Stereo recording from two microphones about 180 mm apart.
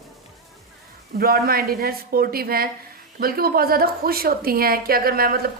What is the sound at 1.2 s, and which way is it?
A woman's voice, 60° right (ahead or behind).